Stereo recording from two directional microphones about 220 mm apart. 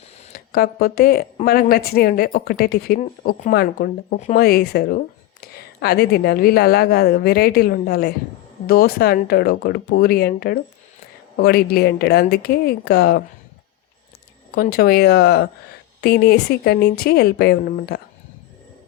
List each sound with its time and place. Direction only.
0.3 s a woman's voice: 40° left (ahead or behind)
14.5 s a woman's voice: 45° left (ahead or behind)